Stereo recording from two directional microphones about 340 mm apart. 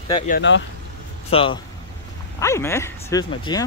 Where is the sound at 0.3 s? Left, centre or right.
Left.